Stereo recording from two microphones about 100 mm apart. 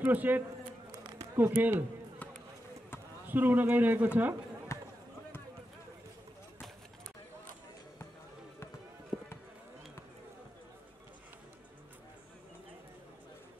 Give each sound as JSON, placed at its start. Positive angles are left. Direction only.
{"t": 0.0, "sound": "a man's voice", "side_deg": -15}
{"t": 3.3, "sound": "a man's voice", "side_deg": -20}
{"t": 4.7, "sound": "a sound", "side_deg": 30}